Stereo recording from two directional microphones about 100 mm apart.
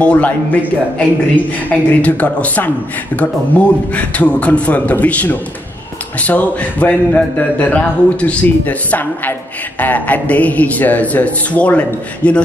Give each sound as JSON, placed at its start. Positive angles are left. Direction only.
{"t": 0.0, "sound": "speech", "side_deg": 15}